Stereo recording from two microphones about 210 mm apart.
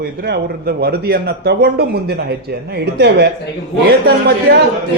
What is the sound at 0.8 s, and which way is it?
A man's voice, 50° right (ahead or behind).